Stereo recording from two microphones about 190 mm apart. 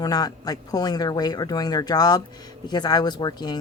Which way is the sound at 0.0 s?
20° left (ahead or behind).